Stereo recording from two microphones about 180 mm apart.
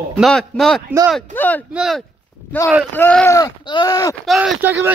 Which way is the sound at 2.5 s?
10° left (ahead or behind).